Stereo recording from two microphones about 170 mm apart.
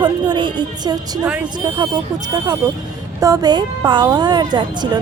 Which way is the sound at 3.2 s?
20° right (ahead or behind).